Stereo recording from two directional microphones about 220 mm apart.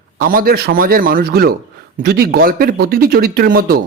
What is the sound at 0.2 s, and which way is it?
A man's voice, 40° right (ahead or behind).